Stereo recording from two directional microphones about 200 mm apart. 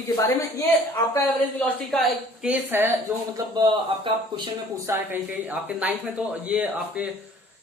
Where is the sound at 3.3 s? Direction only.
20° right (ahead or behind); by 7.1 s 5° right (ahead or behind).